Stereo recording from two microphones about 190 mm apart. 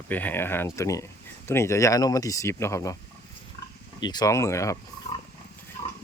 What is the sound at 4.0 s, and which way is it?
Speech, 20° left (ahead or behind).